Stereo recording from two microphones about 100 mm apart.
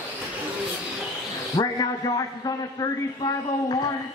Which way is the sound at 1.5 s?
40° left (ahead or behind).